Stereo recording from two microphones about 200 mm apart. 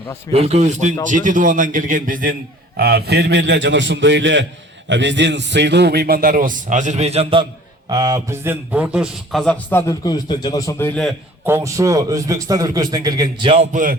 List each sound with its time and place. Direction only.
0.3 s a man's voice: 30° right (ahead or behind); by 11.0 s 10° left (ahead or behind)
11.4 s a man's voice: 15° right (ahead or behind)